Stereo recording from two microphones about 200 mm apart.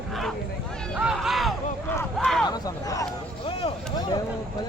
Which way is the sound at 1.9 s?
10° left (ahead or behind).